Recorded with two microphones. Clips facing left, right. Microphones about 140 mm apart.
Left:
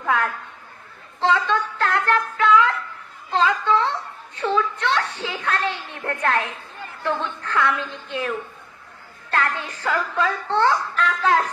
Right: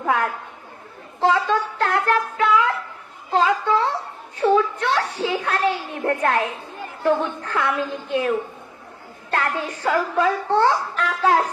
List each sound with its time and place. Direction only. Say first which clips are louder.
0.0 s chatter: right 1 dB; 25° right (ahead or behind)
1.2 s child singing: right 2 dB; 25° right (ahead or behind)
3.3 s a sound: right 1 dB; 20° right (ahead or behind)
5.7 s a child's voice: right 6 dB; 20° right (ahead or behind)